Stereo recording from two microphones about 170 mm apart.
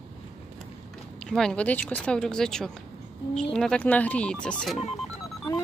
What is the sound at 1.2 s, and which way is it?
Speech, 5° left (ahead or behind).